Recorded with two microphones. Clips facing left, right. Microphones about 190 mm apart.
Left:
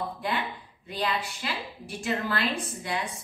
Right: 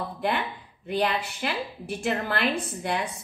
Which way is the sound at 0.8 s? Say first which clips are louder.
Right 4 dB; 55° right (ahead or behind).